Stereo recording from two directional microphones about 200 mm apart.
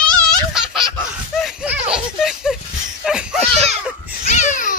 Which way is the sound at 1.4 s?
5° right (ahead or behind).